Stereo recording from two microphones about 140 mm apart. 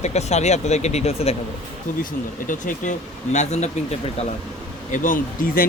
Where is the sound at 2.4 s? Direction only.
70° left (ahead or behind).